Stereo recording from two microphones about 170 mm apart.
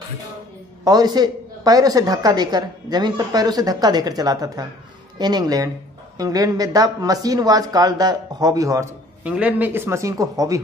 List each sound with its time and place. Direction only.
0.8 s a man's voice: 25° right (ahead or behind)
9.2 s speech: 5° right (ahead or behind)